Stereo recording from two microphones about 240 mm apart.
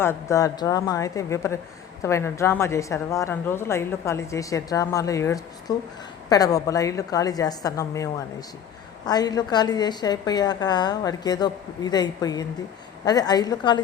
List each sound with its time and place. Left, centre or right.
0.0 s a woman's voice: centre